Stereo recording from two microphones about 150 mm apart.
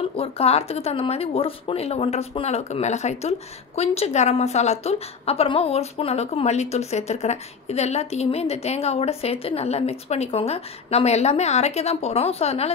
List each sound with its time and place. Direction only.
0.2 s speech: 45° left (ahead or behind)